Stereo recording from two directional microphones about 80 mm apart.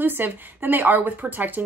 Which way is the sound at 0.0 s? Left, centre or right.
Right.